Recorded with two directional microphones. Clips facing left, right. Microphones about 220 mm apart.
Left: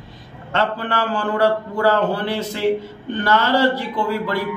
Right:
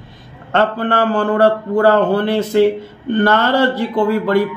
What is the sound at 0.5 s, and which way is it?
Speech, 55° right (ahead or behind).